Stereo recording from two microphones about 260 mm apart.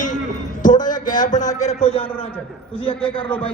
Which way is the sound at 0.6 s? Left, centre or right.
Left.